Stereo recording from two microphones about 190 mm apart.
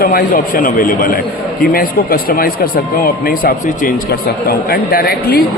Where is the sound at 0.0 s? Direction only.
50° left (ahead or behind).